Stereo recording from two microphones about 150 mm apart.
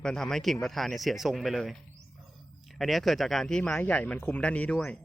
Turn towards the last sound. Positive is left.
turn(degrees=5)  # may be behind; listen again after turning